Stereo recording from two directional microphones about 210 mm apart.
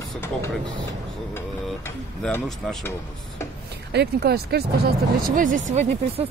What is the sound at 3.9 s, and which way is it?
Speech, 50° right (ahead or behind).